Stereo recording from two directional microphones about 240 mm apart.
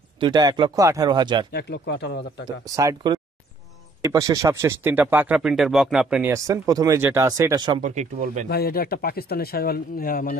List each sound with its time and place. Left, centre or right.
0.2 s speech: centre
1.5 s speech: left
2.6 s speech: centre
7.8 s speech: right
8.5 s speech: left